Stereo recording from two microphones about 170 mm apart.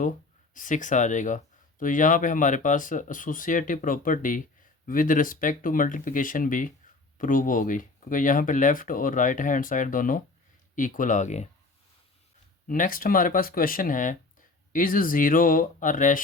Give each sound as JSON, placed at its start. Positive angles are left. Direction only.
{"t": 0.5, "sound": "speech", "side_deg": 50}
{"t": 12.6, "sound": "speech", "side_deg": 55}